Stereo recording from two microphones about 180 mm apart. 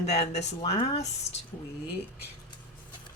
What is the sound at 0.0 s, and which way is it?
Speech, 40° left (ahead or behind).